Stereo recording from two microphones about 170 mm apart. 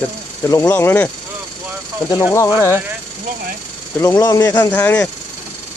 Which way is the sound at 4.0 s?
20° left (ahead or behind).